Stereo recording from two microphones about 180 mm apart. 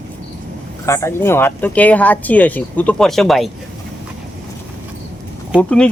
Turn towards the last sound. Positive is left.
turn(degrees=5)  # may be behind; listen again after turning